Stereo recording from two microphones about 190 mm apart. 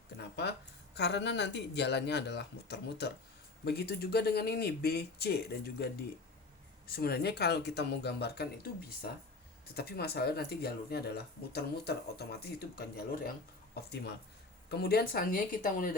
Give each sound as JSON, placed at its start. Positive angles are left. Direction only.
{"t": 0.2, "sound": "speech", "side_deg": 60}